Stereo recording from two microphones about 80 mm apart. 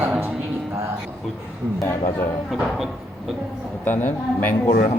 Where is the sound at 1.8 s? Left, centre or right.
Left.